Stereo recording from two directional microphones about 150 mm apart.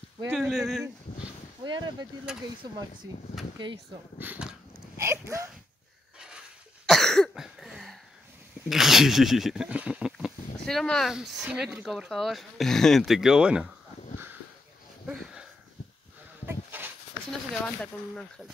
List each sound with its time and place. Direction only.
0.3 s speech: centre (ahead or behind)
1.6 s speech: 30° right (ahead or behind)
2.3 s speech: 5° right (ahead or behind)
3.5 s speech: 30° right (ahead or behind)
4.2 s speech: 10° right (ahead or behind)
4.9 s a sound: 20° right (ahead or behind)
6.1 s a sound: 5° right (ahead or behind)
6.9 s cough: centre (ahead or behind)
8.6 s speech: centre (ahead or behind)
16.4 s a sound: 15° right (ahead or behind)
17.3 s speech: 5° left (ahead or behind)